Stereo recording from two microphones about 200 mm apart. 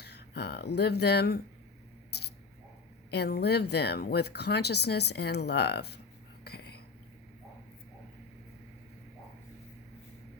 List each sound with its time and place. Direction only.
0.0 s speech: 55° left (ahead or behind)
3.1 s speech: 55° left (ahead or behind)
6.4 s a sound: 55° left (ahead or behind)